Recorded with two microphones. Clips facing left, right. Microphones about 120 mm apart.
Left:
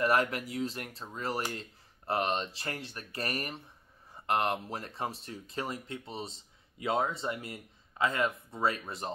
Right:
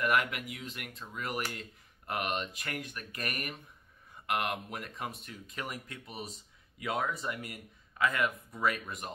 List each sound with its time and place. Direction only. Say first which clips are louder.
0.0 s speech: left 2 dB; 35° left (ahead or behind)